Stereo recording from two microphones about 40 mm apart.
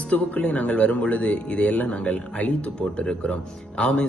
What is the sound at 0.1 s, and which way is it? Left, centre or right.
Speech, left.